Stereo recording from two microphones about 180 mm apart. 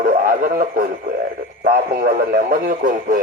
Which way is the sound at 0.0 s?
45° right (ahead or behind).